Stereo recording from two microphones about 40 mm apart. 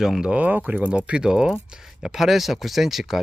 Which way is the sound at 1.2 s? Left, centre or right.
Centre.